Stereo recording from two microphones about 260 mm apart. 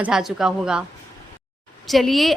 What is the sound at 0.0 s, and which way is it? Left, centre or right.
Speech, centre.